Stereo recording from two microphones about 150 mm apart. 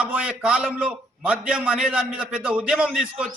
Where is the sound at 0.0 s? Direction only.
10° right (ahead or behind).